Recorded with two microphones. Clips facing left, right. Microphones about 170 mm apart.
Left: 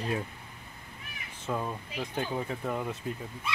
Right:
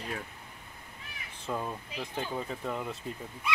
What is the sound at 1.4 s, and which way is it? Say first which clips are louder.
Speech: left 2 dB; centre (ahead or behind).